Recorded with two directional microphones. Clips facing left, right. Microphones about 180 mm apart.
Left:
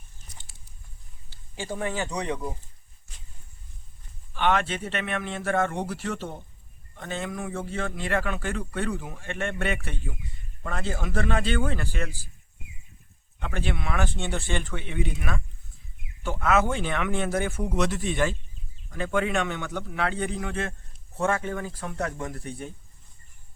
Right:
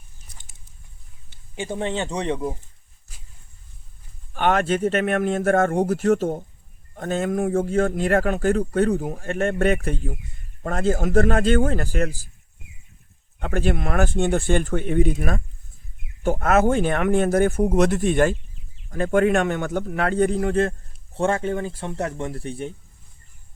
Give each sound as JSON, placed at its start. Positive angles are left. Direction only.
{"t": 1.3, "sound": "speech", "side_deg": -20}
{"t": 4.4, "sound": "a man's voice", "side_deg": -45}
{"t": 13.4, "sound": "a man's voice", "side_deg": -45}